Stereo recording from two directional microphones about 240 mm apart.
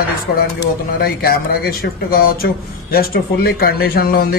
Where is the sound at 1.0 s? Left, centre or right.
Left.